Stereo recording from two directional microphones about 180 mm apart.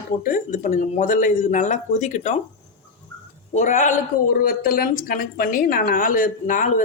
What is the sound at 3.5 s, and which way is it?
A woman's voice, 40° left (ahead or behind).